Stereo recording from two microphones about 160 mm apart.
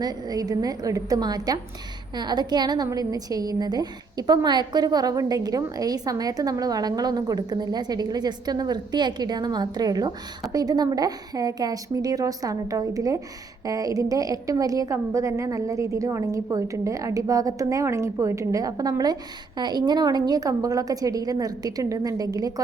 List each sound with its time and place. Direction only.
0.0 s a woman's voice: 25° right (ahead or behind)